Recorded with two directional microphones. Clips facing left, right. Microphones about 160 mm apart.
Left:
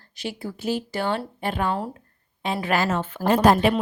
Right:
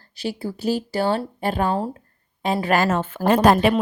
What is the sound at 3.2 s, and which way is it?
Speech, 70° right (ahead or behind).